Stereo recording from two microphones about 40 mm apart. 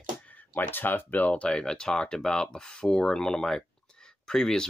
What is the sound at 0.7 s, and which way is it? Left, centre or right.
Speech, left.